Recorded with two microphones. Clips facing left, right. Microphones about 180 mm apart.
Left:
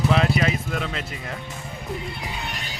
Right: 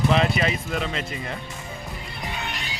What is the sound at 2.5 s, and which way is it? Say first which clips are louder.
Music: even; 45° left (ahead or behind).